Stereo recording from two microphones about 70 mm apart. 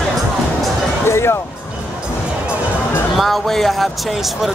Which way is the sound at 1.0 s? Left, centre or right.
Left.